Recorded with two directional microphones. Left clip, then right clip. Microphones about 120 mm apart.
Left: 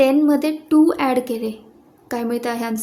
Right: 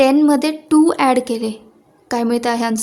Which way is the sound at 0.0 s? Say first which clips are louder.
Right 3 dB; 45° right (ahead or behind).